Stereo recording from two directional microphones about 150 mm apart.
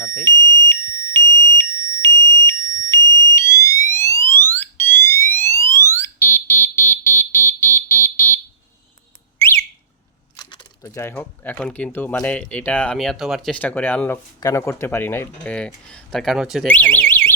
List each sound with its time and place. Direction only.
0.0 s alarm: 20° left (ahead or behind)
10.3 s keys jangling: 30° left (ahead or behind)
10.8 s speech: 15° left (ahead or behind); by 16.6 s 5° right (ahead or behind)
16.6 s speech: 10° left (ahead or behind)